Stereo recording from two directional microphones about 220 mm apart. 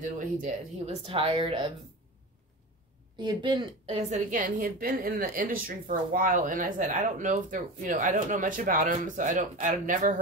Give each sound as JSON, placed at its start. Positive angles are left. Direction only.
{"t": 0.0, "sound": "a woman's voice", "side_deg": -35}
{"t": 1.0, "sound": "a woman's voice", "side_deg": -25}
{"t": 3.2, "sound": "a woman's voice", "side_deg": -20}